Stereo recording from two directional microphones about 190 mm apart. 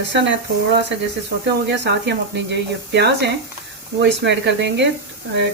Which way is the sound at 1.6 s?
70° right (ahead or behind).